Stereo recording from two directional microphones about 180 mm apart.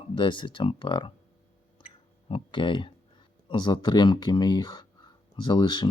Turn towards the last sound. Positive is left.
turn(degrees=25)  # may be behind; listen again after turning